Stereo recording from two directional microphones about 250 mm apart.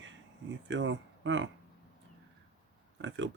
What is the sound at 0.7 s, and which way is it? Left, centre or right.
Speech, right.